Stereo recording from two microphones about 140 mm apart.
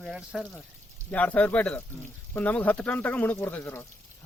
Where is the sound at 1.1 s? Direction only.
10° left (ahead or behind).